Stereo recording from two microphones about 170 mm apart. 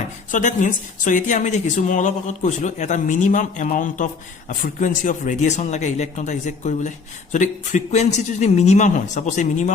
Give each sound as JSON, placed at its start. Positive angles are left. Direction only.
{"t": 0.3, "sound": "speech", "side_deg": 50}